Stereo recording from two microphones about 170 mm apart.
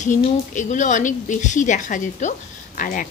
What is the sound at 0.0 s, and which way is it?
Speech, 45° left (ahead or behind).